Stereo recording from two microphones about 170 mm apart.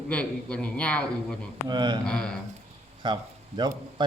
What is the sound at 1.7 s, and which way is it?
Speech, 25° right (ahead or behind).